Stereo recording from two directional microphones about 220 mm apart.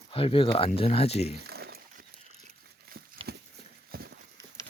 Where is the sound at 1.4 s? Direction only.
45° right (ahead or behind).